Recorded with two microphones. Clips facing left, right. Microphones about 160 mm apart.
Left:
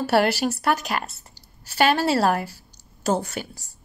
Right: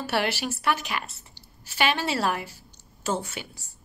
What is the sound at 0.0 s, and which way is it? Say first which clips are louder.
A woman's voice: left 7 dB; 40° left (ahead or behind).